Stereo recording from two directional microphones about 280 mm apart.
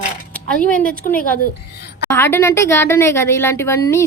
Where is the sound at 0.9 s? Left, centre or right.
Left.